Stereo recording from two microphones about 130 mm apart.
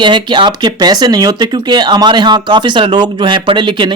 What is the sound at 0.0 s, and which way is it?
Speech, 40° right (ahead or behind).